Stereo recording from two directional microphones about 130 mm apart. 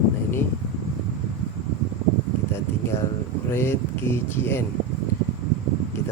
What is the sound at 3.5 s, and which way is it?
Speech, 20° left (ahead or behind).